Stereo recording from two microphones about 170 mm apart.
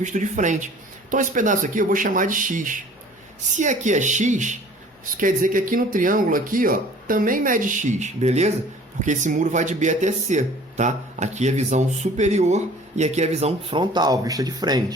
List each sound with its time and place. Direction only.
0.0 s speech: 45° right (ahead or behind); by 14.9 s 25° right (ahead or behind)